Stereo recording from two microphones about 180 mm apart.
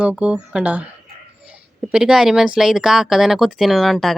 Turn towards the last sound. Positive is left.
turn(degrees=0)  # may be behind; listen again after turning